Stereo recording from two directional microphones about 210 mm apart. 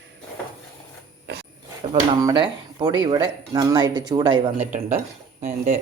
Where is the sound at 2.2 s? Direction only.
20° right (ahead or behind).